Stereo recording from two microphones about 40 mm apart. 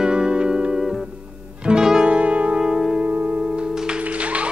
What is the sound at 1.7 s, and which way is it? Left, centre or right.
Music, centre.